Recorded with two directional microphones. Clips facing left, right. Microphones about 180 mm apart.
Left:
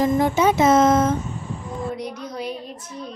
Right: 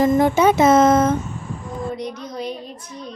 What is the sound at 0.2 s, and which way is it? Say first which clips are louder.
Speech: right 3 dB; 55° right (ahead or behind).